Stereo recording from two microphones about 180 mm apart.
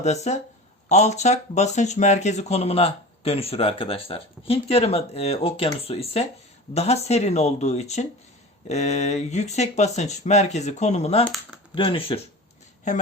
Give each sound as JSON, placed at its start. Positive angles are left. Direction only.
{"t": 0.0, "sound": "speech", "side_deg": 40}